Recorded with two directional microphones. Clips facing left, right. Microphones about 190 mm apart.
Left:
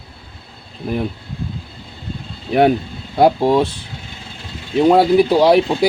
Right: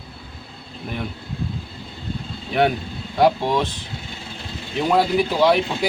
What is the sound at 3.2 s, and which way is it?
Speech, 35° left (ahead or behind).